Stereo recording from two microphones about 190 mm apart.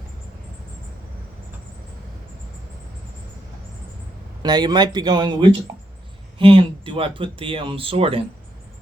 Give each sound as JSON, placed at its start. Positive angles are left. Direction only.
{"t": 4.4, "sound": "speech", "side_deg": -20}